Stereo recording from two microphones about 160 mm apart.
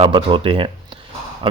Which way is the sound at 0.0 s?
35° right (ahead or behind).